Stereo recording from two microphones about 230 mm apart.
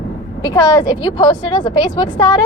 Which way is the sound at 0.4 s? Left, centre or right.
Centre.